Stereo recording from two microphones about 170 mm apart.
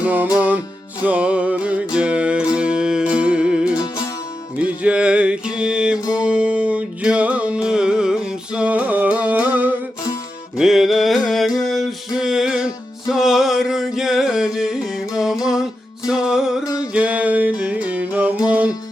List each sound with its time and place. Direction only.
0.0 s music: 10° right (ahead or behind)
3.8 s music: 20° left (ahead or behind)
4.6 s music: 5° right (ahead or behind)
16.6 s a sound: 20° left (ahead or behind)
16.9 s music: 5° right (ahead or behind)